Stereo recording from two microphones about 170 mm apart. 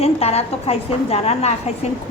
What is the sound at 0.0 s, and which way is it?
A woman's voice, 35° left (ahead or behind).